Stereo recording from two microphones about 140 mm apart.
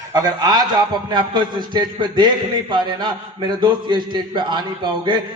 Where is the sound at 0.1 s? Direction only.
30° right (ahead or behind).